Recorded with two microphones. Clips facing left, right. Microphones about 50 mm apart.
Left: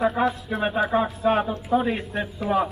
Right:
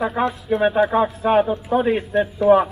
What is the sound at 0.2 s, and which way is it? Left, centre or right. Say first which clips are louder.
Speech: right 2 dB; centre.